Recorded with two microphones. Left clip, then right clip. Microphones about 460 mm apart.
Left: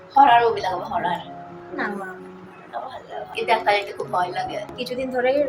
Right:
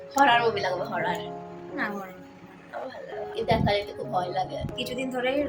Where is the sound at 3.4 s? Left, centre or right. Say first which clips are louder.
Left 6 dB; right.